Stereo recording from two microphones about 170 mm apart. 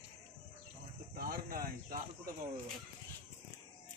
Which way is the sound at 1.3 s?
60° right (ahead or behind).